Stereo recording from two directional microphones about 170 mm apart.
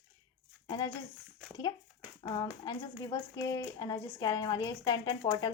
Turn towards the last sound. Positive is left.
turn(degrees=25)  # may be behind; listen again after turning